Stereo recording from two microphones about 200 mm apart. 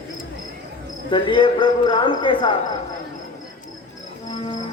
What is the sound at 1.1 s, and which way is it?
Speech, 25° left (ahead or behind).